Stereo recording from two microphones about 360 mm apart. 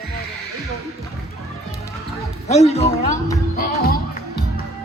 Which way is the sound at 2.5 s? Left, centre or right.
Centre.